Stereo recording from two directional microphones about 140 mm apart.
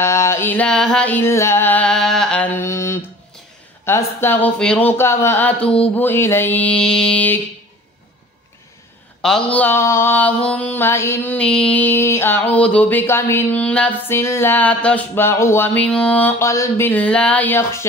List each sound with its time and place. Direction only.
0.0 s mantra: 20° left (ahead or behind)
2.5 s mantra: 20° left (ahead or behind)
9.2 s mantra: 5° left (ahead or behind)